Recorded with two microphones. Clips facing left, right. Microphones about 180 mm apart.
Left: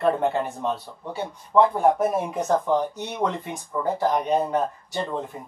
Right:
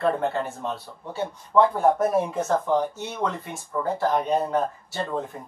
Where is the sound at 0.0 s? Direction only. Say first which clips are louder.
Left 2 dB; 15° left (ahead or behind).